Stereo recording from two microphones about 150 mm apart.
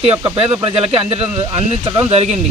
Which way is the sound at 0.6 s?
40° right (ahead or behind).